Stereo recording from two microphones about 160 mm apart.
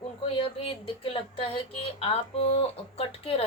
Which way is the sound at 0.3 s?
35° left (ahead or behind).